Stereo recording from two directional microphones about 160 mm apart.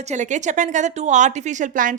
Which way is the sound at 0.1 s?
50° right (ahead or behind).